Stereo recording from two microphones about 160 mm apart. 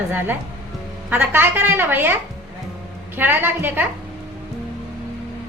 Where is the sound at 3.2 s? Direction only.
15° right (ahead or behind).